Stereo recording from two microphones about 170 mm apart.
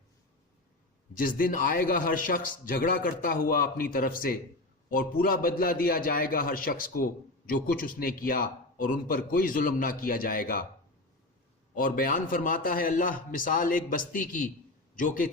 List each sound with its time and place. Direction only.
1.1 s a man's voice: 55° left (ahead or behind)
11.7 s a man's voice: 55° left (ahead or behind)